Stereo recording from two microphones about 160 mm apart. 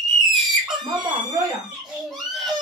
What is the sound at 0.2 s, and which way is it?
Screaming, centre (ahead or behind).